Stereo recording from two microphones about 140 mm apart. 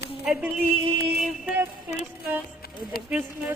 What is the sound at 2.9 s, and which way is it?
Speech, 90° left.